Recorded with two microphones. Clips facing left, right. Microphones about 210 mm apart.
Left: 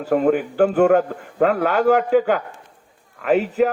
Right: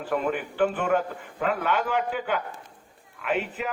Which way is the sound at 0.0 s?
40° left (ahead or behind).